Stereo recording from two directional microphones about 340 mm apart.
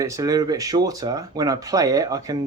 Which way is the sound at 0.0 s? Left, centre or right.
Centre.